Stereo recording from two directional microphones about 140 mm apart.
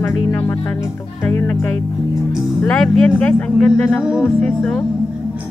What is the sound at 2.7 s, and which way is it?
Speech, 10° left (ahead or behind).